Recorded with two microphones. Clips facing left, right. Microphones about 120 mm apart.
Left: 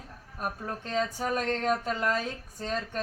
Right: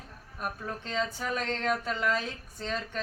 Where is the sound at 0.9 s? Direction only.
45° left (ahead or behind).